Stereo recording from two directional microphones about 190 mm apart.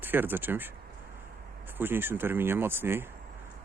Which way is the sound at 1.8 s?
10° right (ahead or behind).